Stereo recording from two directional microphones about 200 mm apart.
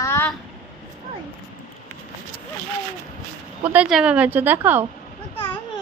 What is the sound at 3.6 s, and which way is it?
A woman's voice, 5° right (ahead or behind).